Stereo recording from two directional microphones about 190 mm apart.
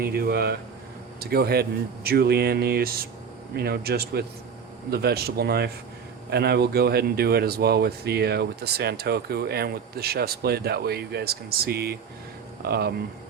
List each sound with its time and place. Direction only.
0.0 s speech: 55° right (ahead or behind)